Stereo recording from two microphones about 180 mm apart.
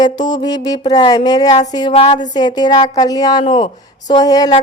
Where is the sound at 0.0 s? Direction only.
25° left (ahead or behind).